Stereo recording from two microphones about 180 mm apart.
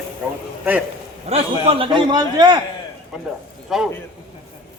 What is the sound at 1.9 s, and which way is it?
Speech, 25° right (ahead or behind).